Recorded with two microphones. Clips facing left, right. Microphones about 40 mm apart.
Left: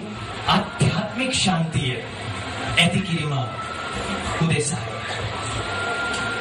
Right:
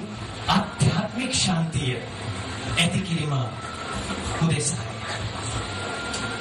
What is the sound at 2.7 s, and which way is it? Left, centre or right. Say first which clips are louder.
Speech: left 4 dB; left.